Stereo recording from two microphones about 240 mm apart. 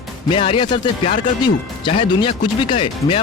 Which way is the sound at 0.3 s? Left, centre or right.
Left.